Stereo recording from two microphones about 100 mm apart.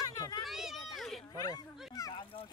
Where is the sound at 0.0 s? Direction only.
40° left (ahead or behind).